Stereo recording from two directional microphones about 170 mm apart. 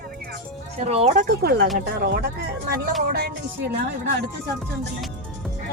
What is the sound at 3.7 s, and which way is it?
Speech, 70° right (ahead or behind).